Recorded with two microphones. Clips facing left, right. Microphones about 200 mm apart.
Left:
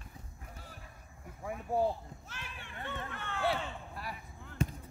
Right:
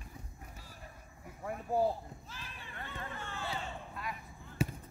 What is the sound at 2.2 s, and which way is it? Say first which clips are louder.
Run: left 1 dB; 75° left (ahead or behind).